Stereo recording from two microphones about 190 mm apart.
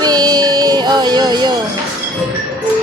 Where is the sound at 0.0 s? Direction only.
20° right (ahead or behind).